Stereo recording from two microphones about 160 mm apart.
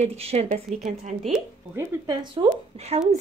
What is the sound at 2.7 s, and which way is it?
Speech, 40° right (ahead or behind).